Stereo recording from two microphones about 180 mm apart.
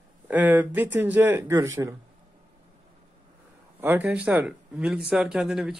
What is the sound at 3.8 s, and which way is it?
Speech, 10° right (ahead or behind).